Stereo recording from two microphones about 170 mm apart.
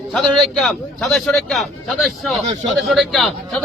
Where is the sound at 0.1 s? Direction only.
5° left (ahead or behind).